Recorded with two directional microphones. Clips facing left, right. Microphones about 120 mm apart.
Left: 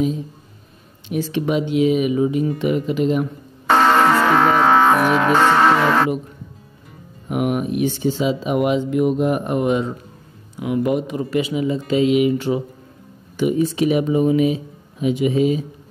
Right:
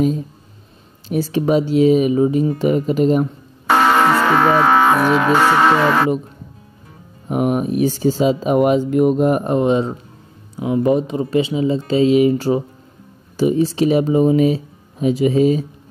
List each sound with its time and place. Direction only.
1.0 s speech: 40° right (ahead or behind)
3.6 s speech: 5° right (ahead or behind)
7.2 s speech: 35° right (ahead or behind)